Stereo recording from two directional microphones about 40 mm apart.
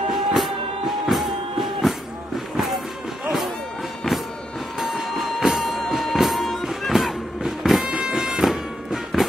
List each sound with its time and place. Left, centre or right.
0.1 s music: centre
4.7 s music: centre